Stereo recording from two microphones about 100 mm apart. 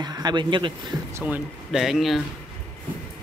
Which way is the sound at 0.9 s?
35° right (ahead or behind).